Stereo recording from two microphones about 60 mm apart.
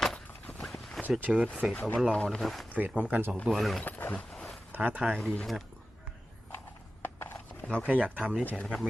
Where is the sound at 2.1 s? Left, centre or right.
Centre.